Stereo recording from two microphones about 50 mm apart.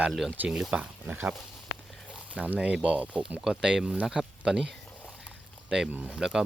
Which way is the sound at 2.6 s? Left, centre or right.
Right.